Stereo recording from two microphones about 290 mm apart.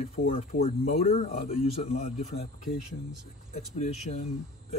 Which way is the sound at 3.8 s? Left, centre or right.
Left.